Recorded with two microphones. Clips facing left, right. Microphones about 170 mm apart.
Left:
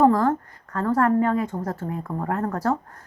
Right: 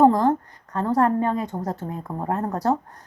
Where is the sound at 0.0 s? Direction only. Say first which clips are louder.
Right 1 dB; 20° right (ahead or behind).